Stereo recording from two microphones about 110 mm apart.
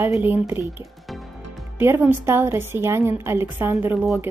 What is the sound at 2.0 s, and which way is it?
A woman's voice, 20° right (ahead or behind).